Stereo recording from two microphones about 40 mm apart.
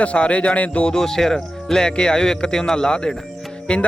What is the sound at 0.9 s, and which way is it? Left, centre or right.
Speech, centre.